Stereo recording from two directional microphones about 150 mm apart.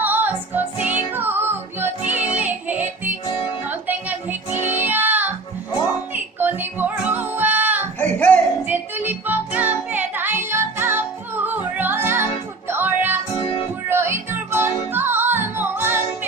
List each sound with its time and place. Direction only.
0.0 s music: 10° right (ahead or behind)
7.9 s music: 10° left (ahead or behind)
8.6 s music: 15° right (ahead or behind)
13.4 s music: 35° left (ahead or behind)
13.9 s music: 15° right (ahead or behind)